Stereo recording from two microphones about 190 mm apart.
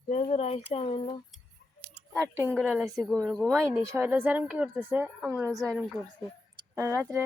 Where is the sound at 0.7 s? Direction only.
30° left (ahead or behind).